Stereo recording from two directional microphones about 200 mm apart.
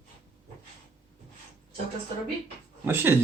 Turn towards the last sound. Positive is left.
turn(degrees=-10)  # may be behind; listen again after turning